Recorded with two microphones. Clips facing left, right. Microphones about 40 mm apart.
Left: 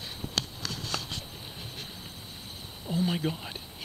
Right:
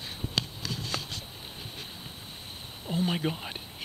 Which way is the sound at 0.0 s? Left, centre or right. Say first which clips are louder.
Right 1 dB; centre.